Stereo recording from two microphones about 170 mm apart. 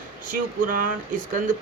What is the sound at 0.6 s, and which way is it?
Speech, 55° right (ahead or behind).